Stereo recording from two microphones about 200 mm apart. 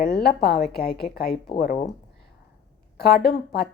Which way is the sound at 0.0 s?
50° left (ahead or behind).